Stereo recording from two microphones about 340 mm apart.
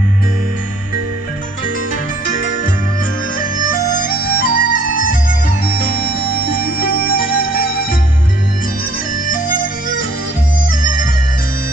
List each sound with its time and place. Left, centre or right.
3.7 s music: left
6.5 s music: left
9.3 s music: left